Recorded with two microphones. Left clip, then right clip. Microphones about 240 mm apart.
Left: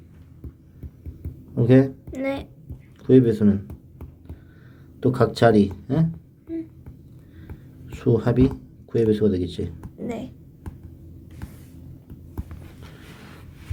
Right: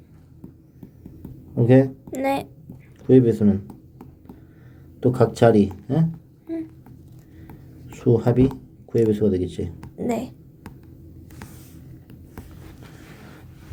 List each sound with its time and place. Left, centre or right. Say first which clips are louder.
1.5 s speech: right 1 dB; centre
2.1 s a child's voice: right 5 dB; right
3.0 s speech: right 1 dB; centre
4.9 s speech: right 1 dB; centre
7.9 s speech: right 2 dB; centre
10.0 s speech: right 6 dB; right